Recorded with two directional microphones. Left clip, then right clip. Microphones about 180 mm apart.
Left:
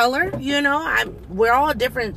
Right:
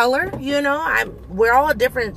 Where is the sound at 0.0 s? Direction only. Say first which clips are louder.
Right 1 dB; 15° right (ahead or behind).